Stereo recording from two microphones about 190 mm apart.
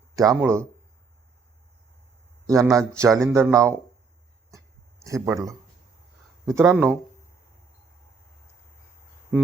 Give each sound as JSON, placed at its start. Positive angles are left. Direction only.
{"t": 0.2, "sound": "speech", "side_deg": -15}
{"t": 2.5, "sound": "speech", "side_deg": -15}
{"t": 4.5, "sound": "a sound", "side_deg": -15}
{"t": 6.4, "sound": "speech", "side_deg": -15}